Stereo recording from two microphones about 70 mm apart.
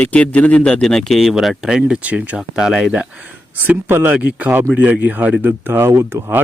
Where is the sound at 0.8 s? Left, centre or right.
Centre.